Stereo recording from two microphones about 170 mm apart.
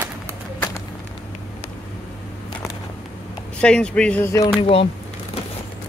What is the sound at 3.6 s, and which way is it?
Speech, 5° left (ahead or behind).